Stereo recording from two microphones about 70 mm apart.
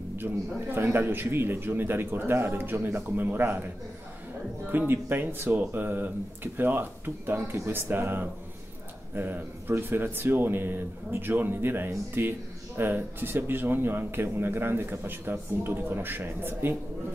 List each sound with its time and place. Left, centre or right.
0.2 s speech: right
4.6 s speech: right